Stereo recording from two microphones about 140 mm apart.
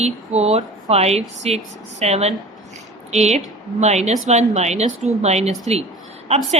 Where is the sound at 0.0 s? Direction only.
50° right (ahead or behind).